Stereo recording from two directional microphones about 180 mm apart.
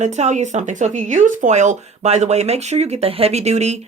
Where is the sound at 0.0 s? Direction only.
40° right (ahead or behind).